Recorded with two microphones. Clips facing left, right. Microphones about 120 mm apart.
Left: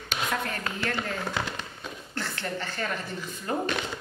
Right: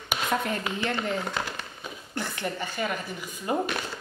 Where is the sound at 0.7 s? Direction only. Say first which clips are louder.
Right 2 dB; 15° right (ahead or behind).